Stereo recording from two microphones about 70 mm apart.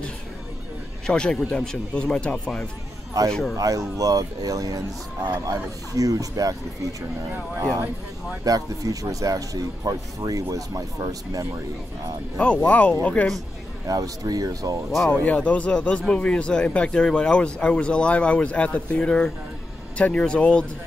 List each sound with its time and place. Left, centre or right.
1.0 s a man's voice: centre
3.5 s speech: right
7.2 s speech: right
8.6 s speech: right
12.4 s a man's voice: centre
13.8 s speech: right
15.0 s a man's voice: centre